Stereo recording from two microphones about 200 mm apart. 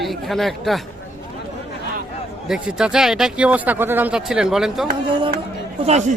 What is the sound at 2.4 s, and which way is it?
Speech, centre (ahead or behind).